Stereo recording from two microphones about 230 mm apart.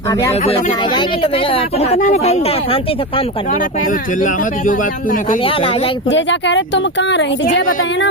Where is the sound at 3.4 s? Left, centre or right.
Left.